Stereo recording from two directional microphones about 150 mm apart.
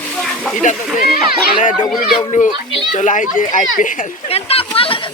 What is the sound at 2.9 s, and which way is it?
A child's voice, 60° left (ahead or behind).